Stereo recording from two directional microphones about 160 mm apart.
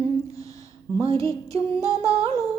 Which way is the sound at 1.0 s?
20° left (ahead or behind).